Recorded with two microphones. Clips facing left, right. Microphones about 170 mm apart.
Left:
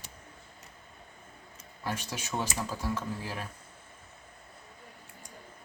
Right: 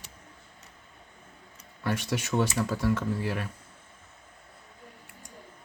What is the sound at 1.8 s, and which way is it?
Speech, 65° right (ahead or behind).